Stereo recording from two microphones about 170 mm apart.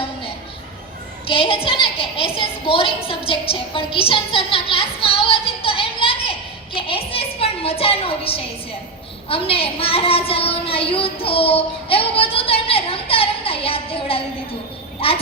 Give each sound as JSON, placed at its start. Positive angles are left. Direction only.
{"t": 1.3, "sound": "a woman's voice", "side_deg": 35}